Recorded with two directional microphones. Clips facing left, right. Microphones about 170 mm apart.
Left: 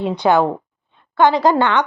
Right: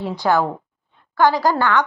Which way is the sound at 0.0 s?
20° left (ahead or behind).